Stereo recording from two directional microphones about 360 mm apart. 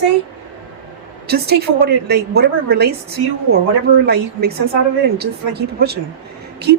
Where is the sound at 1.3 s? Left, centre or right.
Right.